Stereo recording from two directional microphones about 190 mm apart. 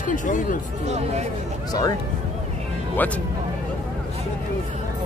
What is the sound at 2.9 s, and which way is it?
Speech, 5° left (ahead or behind).